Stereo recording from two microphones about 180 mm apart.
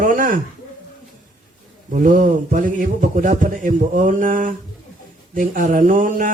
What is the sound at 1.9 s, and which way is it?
A man's voice, 45° right (ahead or behind).